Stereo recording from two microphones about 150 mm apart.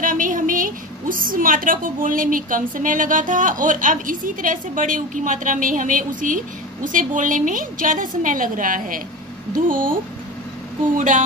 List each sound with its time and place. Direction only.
0.0 s a woman's voice: 60° right (ahead or behind)
11.0 s a woman's voice: 55° right (ahead or behind)